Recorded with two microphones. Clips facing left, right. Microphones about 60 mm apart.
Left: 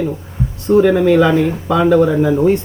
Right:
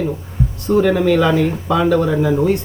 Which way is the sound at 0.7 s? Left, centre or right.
Centre.